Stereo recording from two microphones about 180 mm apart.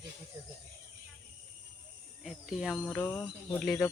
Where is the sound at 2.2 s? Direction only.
Centre (ahead or behind).